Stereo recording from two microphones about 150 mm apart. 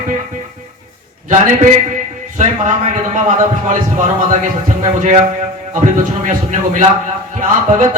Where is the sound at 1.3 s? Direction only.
55° right (ahead or behind).